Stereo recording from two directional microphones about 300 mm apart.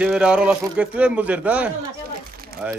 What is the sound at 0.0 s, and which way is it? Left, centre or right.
Speech, centre.